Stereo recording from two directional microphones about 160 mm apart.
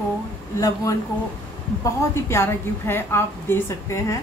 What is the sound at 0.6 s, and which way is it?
Speech, 20° left (ahead or behind).